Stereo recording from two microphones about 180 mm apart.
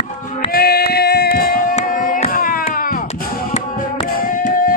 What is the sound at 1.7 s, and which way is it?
Hands, 50° left (ahead or behind).